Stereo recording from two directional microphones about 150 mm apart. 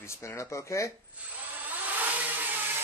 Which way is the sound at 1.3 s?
10° right (ahead or behind).